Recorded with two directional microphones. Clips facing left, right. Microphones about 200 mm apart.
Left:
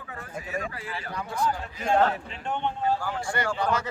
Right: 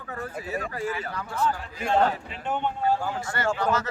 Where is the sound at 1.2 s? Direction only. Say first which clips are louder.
Left 1 dB; 15° left (ahead or behind).